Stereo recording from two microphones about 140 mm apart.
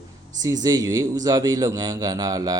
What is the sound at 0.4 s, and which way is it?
A man's voice, 25° right (ahead or behind).